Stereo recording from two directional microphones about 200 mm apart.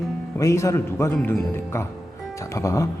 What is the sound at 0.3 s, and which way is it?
Speech, 15° left (ahead or behind).